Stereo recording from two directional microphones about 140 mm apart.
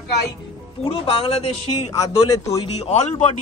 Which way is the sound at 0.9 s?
40° left (ahead or behind).